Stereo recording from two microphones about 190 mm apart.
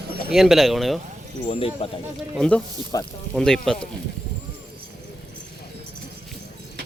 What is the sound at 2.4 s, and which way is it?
Speech, 5° left (ahead or behind).